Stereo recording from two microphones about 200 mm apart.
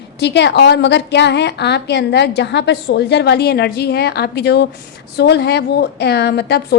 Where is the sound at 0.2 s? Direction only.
60° left (ahead or behind).